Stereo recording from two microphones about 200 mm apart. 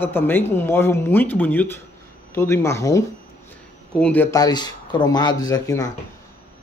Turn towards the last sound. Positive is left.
turn(degrees=15)  # may be behind; listen again after turning